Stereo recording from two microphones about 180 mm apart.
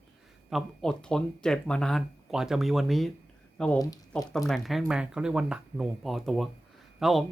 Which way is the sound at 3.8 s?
20° left (ahead or behind).